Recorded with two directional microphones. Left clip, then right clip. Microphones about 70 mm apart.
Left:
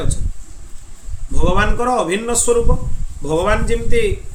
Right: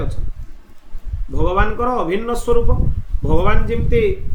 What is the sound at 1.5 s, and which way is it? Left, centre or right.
A man's voice, left.